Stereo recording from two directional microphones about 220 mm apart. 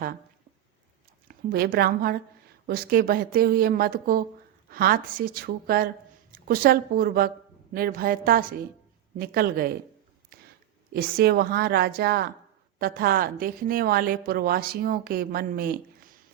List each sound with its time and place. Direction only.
1.5 s a woman's voice: 45° right (ahead or behind)
10.9 s a woman's voice: 45° right (ahead or behind)